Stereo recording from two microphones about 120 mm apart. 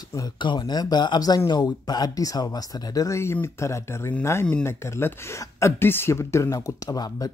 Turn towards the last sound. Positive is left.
turn(degrees=30)  # may be behind; listen again after turning